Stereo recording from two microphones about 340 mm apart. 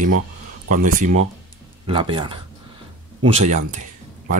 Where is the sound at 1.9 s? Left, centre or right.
Centre.